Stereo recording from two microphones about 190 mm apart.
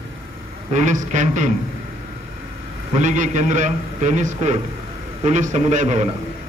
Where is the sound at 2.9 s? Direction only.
40° right (ahead or behind).